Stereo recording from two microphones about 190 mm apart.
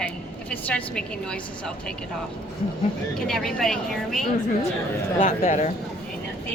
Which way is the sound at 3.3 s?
Centre (ahead or behind).